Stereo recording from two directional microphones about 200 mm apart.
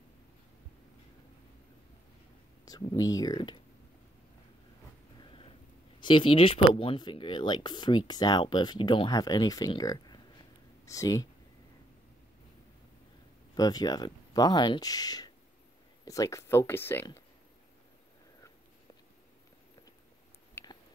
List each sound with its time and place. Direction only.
2.6 s speech: 20° left (ahead or behind)
5.9 s speech: 25° left (ahead or behind)
13.6 s speech: 20° left (ahead or behind)
20.6 s squish: 10° left (ahead or behind)